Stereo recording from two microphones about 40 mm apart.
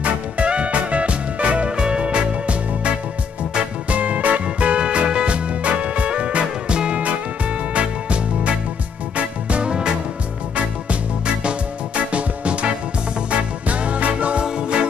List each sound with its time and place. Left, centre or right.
0.0 s music: right
3.9 s music: right
14.4 s music: right